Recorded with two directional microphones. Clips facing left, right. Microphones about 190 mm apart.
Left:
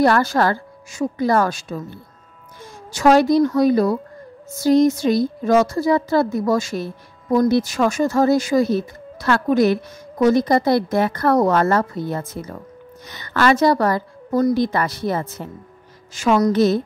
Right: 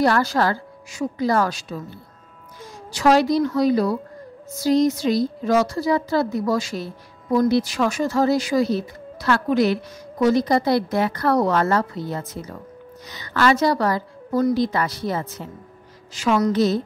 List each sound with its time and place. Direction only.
0.0 s a woman's voice: 50° left (ahead or behind)
2.9 s a woman's voice: 50° left (ahead or behind)